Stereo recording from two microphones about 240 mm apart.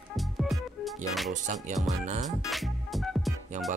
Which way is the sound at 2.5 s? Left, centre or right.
Centre.